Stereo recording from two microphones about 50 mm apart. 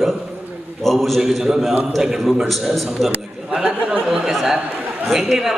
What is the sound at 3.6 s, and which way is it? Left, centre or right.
Speech, right.